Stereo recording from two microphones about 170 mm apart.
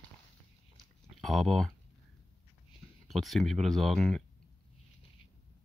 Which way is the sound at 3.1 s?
Centre (ahead or behind).